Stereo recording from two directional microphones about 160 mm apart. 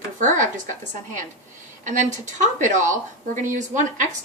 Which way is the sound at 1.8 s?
50° right (ahead or behind).